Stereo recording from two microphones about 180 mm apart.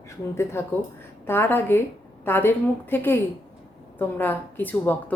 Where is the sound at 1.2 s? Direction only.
10° left (ahead or behind).